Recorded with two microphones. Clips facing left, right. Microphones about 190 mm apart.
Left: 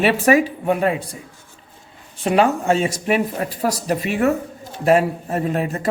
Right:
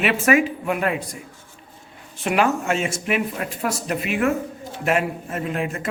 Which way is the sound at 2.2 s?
30° left (ahead or behind).